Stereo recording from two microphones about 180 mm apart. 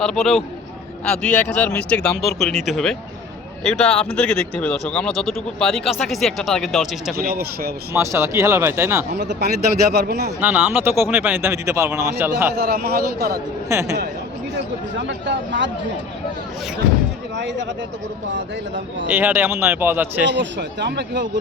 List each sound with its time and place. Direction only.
0.0 s speech: 5° left (ahead or behind)
7.2 s a man's voice: 60° right (ahead or behind)
7.9 s speech: 15° right (ahead or behind)
9.1 s a man's voice: 70° right (ahead or behind)
10.4 s speech: 10° right (ahead or behind)
12.5 s a man's voice: 60° right (ahead or behind)
13.7 s speech: 15° right (ahead or behind)
15.0 s speech: 80° right
17.3 s a man's voice: 75° right (ahead or behind)
19.0 s speech: 10° right (ahead or behind)
20.2 s a man's voice: 75° right (ahead or behind)